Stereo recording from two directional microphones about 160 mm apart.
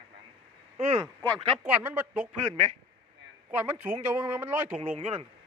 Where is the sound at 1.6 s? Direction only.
10° right (ahead or behind).